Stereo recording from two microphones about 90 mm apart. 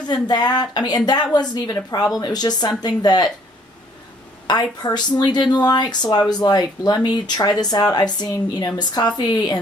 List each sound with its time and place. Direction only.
0.0 s speech: 50° left (ahead or behind)
4.5 s speech: 50° left (ahead or behind)